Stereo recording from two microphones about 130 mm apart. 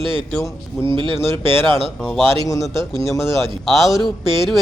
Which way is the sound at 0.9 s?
40° right (ahead or behind).